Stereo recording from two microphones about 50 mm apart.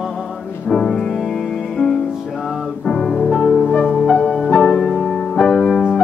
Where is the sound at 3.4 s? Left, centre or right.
Centre.